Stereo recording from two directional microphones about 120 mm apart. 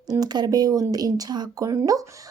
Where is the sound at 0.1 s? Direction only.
35° right (ahead or behind).